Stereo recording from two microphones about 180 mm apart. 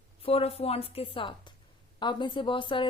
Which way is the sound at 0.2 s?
30° left (ahead or behind).